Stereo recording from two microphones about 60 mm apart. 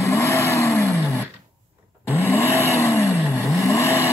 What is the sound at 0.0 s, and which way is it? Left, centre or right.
Vehicle, left.